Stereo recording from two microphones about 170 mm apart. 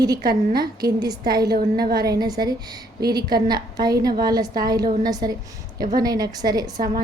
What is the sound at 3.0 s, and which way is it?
Speech, 65° right (ahead or behind).